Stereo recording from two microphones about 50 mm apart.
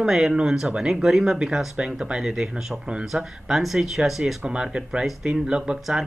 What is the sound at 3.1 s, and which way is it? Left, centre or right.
Speech, centre.